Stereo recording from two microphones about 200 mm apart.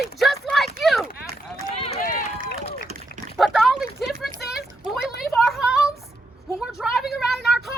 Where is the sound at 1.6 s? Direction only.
30° left (ahead or behind).